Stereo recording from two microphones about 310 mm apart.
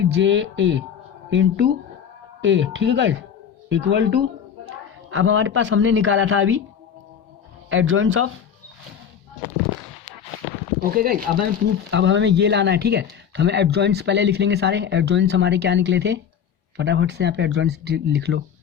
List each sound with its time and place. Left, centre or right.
0.0 s speech: right
7.7 s speech: right
10.9 s speech: right